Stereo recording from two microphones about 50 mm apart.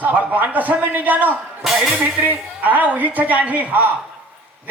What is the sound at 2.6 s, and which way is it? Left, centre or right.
A man's voice, right.